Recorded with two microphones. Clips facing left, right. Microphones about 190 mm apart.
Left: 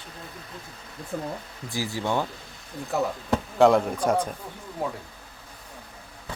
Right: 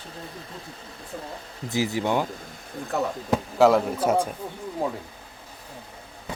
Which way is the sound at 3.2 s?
5° right (ahead or behind).